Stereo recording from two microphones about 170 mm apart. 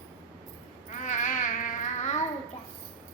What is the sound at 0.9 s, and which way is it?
Babbling, 45° left (ahead or behind).